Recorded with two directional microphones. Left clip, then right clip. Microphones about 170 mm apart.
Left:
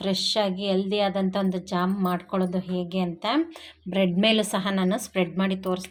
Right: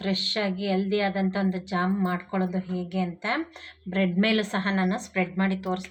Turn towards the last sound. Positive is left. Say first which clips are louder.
# left 1 dB
turn(degrees=35)  # may be behind; listen again after turning